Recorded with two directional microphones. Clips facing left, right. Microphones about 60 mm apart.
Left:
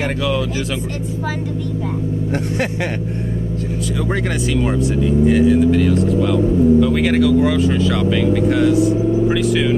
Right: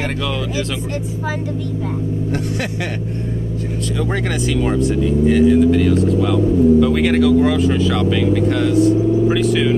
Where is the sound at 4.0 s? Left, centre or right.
Centre.